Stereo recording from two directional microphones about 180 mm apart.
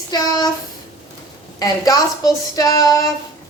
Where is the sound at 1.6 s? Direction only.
20° left (ahead or behind).